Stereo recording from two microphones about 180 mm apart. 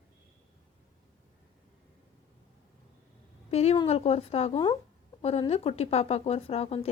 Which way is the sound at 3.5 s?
35° left (ahead or behind).